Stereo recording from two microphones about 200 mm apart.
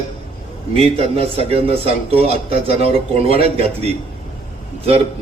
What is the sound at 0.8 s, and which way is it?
A man's voice, 30° right (ahead or behind).